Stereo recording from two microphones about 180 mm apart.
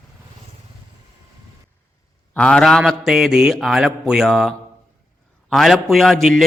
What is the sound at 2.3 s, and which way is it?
A man's voice, 5° left (ahead or behind).